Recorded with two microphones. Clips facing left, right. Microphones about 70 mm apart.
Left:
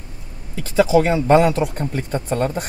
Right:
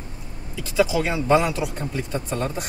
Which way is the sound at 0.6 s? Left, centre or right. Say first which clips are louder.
Left 6 dB; left.